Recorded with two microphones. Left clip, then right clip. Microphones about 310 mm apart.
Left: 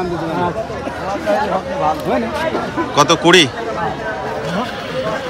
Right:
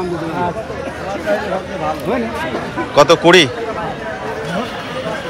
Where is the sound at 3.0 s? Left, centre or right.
Centre.